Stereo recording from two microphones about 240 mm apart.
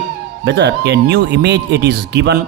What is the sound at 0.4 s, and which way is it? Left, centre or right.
Speech, right.